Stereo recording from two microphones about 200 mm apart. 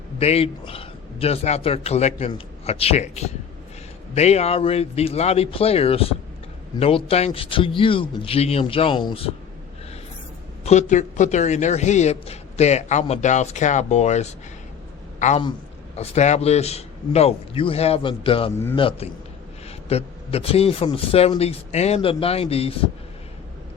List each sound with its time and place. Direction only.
0.2 s a woman's voice: 30° left (ahead or behind)
10.7 s a woman's voice: 35° left (ahead or behind)
16.0 s a woman's voice: 35° left (ahead or behind)
18.5 s a man's voice: 10° left (ahead or behind)
18.8 s a man's voice: 30° left (ahead or behind)